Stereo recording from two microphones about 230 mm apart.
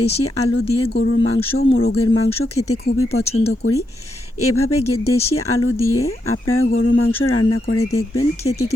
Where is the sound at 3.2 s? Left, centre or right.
Left.